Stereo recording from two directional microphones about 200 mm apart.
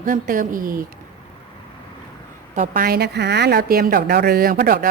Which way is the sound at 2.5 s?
40° right (ahead or behind).